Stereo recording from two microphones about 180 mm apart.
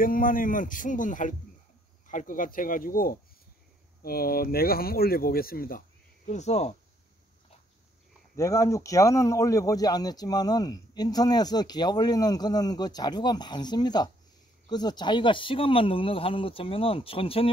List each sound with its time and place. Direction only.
0.0 s speech: 50° left (ahead or behind)
6.2 s speech: 40° left (ahead or behind)
8.4 s speech: 15° left (ahead or behind)